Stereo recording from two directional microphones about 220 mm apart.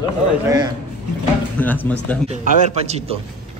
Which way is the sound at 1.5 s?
10° left (ahead or behind).